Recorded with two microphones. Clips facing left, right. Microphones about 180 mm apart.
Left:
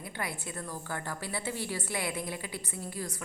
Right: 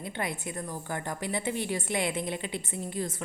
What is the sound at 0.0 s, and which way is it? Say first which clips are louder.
A woman's voice: right 4 dB; 20° right (ahead or behind).